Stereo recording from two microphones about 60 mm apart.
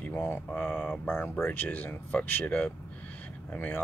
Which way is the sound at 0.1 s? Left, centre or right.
Left.